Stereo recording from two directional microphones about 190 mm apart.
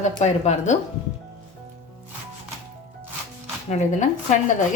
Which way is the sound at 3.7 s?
40° left (ahead or behind).